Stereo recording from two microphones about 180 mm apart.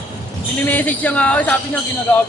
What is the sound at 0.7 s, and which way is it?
Speech, 10° left (ahead or behind).